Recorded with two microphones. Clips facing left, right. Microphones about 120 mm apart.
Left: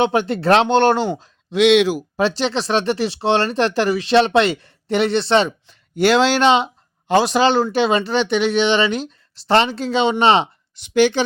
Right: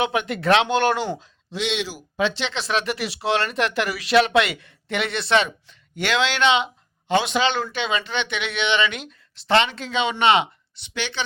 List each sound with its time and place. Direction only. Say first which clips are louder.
0.0 s speech: left 5 dB; 30° left (ahead or behind)
1.5 s speech: left 13 dB; 65° left (ahead or behind)
2.0 s speech: left 5 dB; 40° left (ahead or behind)